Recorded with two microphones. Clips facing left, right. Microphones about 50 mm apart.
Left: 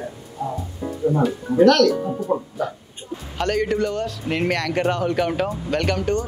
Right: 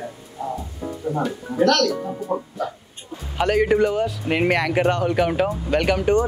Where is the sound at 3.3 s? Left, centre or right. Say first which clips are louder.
Right 4 dB; centre.